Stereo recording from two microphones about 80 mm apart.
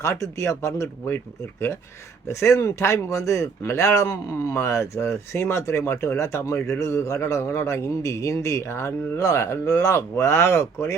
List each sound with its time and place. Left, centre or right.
0.0 s speech: left
2.2 s speech: left